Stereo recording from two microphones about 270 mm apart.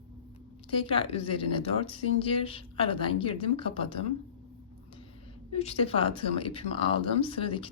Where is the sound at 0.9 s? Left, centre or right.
Left.